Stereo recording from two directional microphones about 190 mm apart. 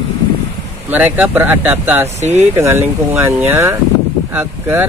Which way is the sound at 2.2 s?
35° right (ahead or behind).